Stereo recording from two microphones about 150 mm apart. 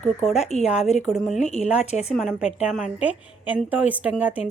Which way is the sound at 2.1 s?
Centre (ahead or behind).